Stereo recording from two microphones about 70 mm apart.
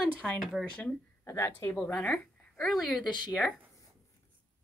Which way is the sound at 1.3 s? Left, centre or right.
Left.